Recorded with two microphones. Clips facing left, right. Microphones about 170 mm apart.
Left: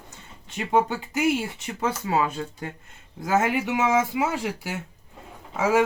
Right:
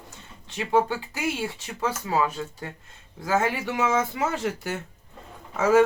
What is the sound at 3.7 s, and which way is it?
Speech, 15° left (ahead or behind).